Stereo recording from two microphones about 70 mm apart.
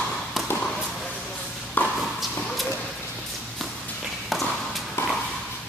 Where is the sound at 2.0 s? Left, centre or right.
Centre.